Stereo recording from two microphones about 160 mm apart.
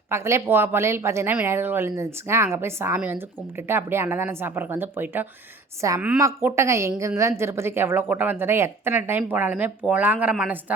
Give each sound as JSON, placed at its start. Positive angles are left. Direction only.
{"t": 0.1, "sound": "speech", "side_deg": -15}